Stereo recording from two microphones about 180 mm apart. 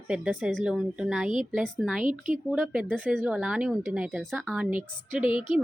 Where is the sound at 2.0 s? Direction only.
45° right (ahead or behind).